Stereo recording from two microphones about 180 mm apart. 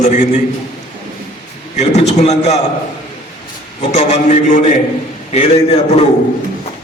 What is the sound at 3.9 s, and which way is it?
A man's voice, 40° left (ahead or behind).